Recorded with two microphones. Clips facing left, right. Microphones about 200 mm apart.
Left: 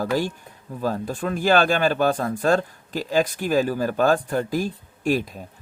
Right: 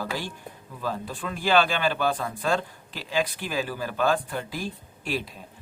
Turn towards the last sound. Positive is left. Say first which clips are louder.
# left 8 dB
turn(degrees=45)  # may be behind; listen again after turning